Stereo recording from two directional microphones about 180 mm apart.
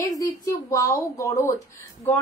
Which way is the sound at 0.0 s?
20° left (ahead or behind).